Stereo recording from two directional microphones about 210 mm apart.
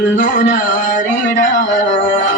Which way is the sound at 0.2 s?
40° left (ahead or behind).